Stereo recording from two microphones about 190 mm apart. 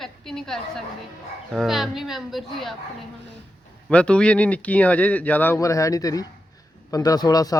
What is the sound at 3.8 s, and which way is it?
Speech, 5° left (ahead or behind).